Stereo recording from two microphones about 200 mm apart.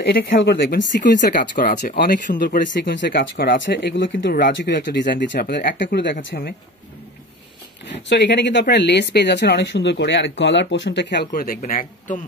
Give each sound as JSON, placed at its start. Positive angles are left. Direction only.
{"t": 0.1, "sound": "speech", "side_deg": 60}
{"t": 1.3, "sound": "speech", "side_deg": 45}
{"t": 7.8, "sound": "speech", "side_deg": 60}